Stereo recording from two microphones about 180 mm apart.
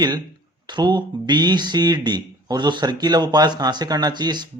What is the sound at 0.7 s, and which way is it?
Speech, 25° right (ahead or behind).